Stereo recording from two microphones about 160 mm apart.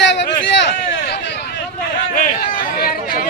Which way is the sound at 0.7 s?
90° left.